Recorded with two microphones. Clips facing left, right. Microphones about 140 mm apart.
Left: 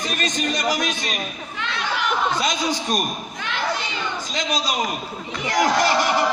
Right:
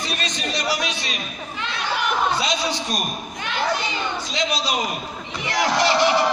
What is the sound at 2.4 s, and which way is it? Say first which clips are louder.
Speech: left 1 dB; 45° left (ahead or behind).